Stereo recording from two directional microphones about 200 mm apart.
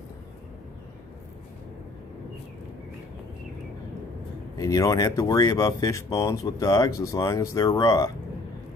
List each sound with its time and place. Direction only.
4.6 s speech: 15° left (ahead or behind)